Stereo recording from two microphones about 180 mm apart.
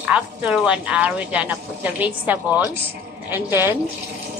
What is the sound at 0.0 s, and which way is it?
A woman's voice, 5° right (ahead or behind).